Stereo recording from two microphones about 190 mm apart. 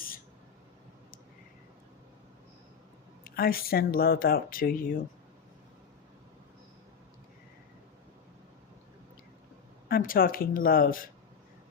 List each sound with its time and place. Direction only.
3.2 s speech: 50° left (ahead or behind)
9.9 s speech: 50° left (ahead or behind)